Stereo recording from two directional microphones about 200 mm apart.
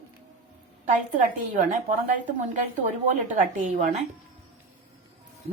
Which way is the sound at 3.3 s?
40° right (ahead or behind).